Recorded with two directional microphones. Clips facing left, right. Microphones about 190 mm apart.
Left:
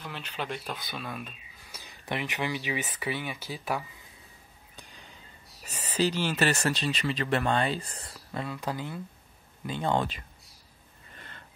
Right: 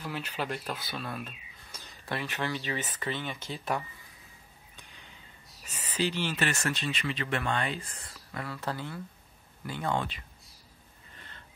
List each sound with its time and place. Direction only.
0.0 s speech: 5° right (ahead or behind)
5.7 s speech: 40° left (ahead or behind)
8.5 s speech: 15° left (ahead or behind)
9.9 s speech: 40° left (ahead or behind)